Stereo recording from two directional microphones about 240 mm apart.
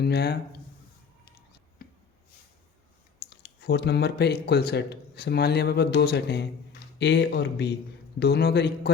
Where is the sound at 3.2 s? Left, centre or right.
Left.